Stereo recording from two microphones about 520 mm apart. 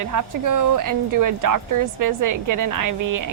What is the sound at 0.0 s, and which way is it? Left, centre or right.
A woman's voice, right.